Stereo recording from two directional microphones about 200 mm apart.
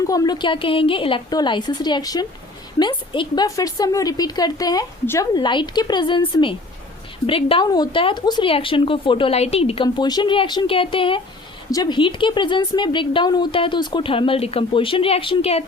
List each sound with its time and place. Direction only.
0.1 s speech: 20° left (ahead or behind)